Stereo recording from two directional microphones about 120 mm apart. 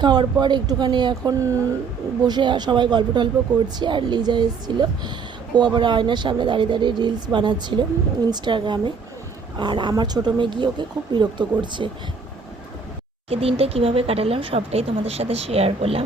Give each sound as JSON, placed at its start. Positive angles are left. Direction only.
{"t": 0.0, "sound": "speech", "side_deg": -35}
{"t": 13.3, "sound": "speech", "side_deg": -55}